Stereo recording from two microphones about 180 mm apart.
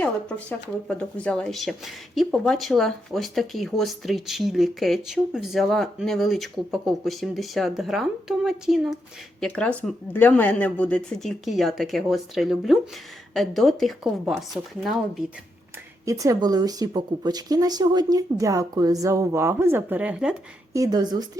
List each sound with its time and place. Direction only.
0.0 s speech: 5° left (ahead or behind)
16.0 s speech: 20° right (ahead or behind)
20.7 s speech: 20° right (ahead or behind)